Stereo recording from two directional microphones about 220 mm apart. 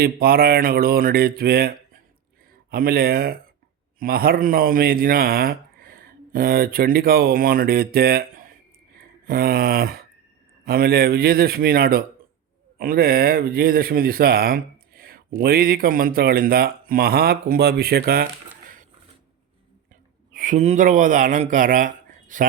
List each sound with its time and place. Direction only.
0.0 s a man's voice: 45° right (ahead or behind)
20.3 s a man's voice: 35° right (ahead or behind)